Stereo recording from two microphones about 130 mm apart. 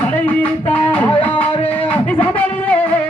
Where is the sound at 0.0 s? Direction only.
10° left (ahead or behind).